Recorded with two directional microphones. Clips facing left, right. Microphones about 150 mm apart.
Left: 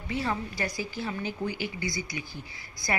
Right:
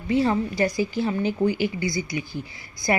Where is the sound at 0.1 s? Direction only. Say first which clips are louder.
Right 10 dB; 30° right (ahead or behind).